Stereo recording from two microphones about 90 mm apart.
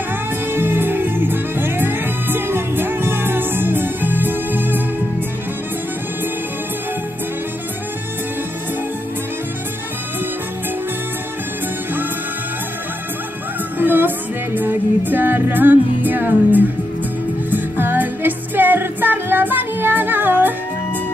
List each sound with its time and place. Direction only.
0.5 s music: 20° right (ahead or behind)
13.7 s music: 20° right (ahead or behind)